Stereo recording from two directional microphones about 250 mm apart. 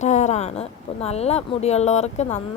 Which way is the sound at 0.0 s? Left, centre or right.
Left.